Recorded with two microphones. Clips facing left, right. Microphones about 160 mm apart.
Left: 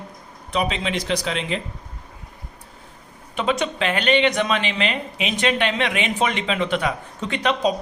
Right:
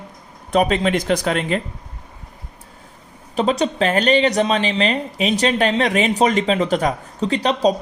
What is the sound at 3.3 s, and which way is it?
Speech, 35° right (ahead or behind).